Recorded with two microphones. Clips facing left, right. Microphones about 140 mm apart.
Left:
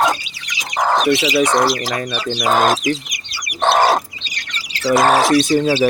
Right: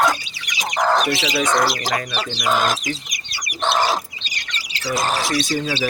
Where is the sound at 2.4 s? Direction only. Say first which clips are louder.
Left 5 dB; 50° left (ahead or behind).